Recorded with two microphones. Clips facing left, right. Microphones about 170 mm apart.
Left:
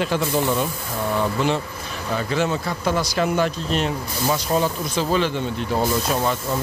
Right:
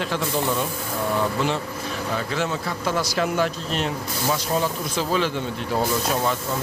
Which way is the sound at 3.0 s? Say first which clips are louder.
Left 1 dB; 5° right (ahead or behind).